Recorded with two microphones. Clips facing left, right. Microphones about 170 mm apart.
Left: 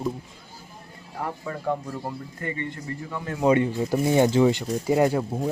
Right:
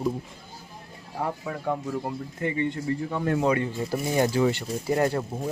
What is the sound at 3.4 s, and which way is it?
Speech, 20° left (ahead or behind).